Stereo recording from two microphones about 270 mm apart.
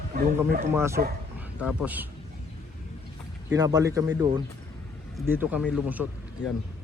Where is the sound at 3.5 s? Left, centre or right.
Centre.